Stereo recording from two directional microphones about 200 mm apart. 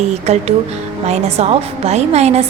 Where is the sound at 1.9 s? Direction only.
30° right (ahead or behind).